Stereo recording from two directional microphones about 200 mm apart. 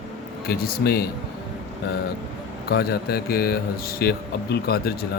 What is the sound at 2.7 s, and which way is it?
Speech, 50° left (ahead or behind).